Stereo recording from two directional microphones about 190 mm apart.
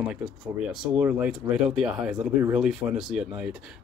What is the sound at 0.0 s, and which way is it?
Speech, 5° right (ahead or behind).